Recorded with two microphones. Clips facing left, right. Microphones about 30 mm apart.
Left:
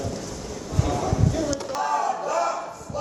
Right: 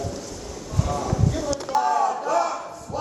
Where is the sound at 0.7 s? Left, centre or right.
Centre.